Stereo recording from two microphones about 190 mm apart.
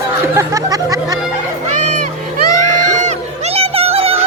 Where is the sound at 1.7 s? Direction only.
40° right (ahead or behind).